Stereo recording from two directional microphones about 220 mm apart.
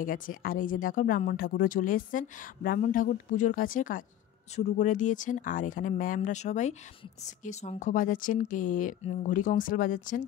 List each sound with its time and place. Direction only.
0.0 s speech: 40° left (ahead or behind)